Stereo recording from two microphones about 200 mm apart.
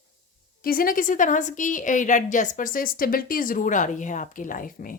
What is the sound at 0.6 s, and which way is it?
A woman's voice, 45° left (ahead or behind).